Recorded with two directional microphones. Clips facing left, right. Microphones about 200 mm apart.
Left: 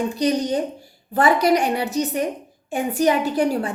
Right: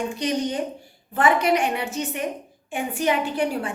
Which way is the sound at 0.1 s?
35° left (ahead or behind).